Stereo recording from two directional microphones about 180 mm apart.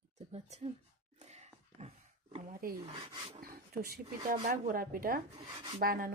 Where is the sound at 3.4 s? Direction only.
55° right (ahead or behind).